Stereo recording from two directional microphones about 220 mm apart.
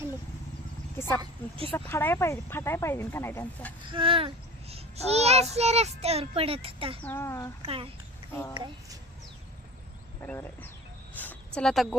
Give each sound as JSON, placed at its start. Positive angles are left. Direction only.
{"t": 0.9, "sound": "speech", "side_deg": 10}
{"t": 1.2, "sound": "a child's voice", "side_deg": -25}
{"t": 1.7, "sound": "speech", "side_deg": 10}
{"t": 3.9, "sound": "a child's voice", "side_deg": -25}
{"t": 7.0, "sound": "speech", "side_deg": 10}
{"t": 7.6, "sound": "a child's voice", "side_deg": -25}
{"t": 10.2, "sound": "speech", "side_deg": 10}
{"t": 11.2, "sound": "a sound", "side_deg": 5}